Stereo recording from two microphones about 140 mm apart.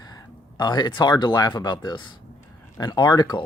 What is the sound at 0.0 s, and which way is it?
Speech, 30° left (ahead or behind).